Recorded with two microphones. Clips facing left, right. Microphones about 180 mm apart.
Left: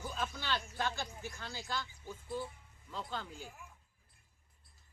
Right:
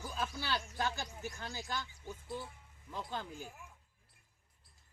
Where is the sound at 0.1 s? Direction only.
10° right (ahead or behind).